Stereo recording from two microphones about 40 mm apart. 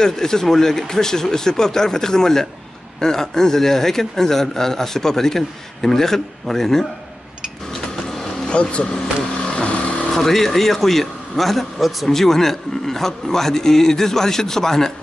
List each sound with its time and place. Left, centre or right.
0.0 s speech: centre
8.5 s speech: left
10.1 s a man's voice: centre